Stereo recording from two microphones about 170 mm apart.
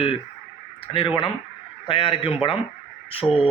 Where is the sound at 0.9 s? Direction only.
30° left (ahead or behind).